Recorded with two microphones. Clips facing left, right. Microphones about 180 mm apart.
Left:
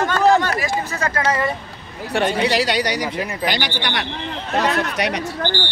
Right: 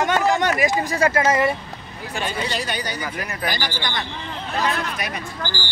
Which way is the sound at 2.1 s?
70° left (ahead or behind).